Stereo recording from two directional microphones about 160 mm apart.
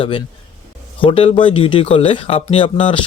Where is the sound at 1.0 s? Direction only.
35° left (ahead or behind).